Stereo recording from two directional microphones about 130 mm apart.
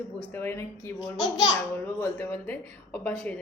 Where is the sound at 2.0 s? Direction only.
20° left (ahead or behind).